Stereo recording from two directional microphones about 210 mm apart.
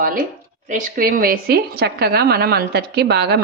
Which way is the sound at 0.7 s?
40° right (ahead or behind).